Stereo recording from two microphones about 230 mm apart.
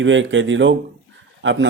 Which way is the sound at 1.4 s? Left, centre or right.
Right.